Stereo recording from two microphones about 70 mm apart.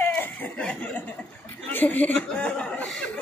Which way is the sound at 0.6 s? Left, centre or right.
Left.